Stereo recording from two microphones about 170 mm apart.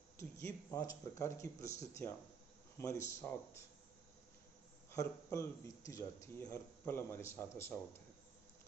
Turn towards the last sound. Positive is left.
turn(degrees=15)  # may be behind; listen again after turning